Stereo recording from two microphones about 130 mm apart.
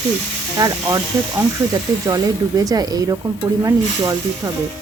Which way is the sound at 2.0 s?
25° right (ahead or behind).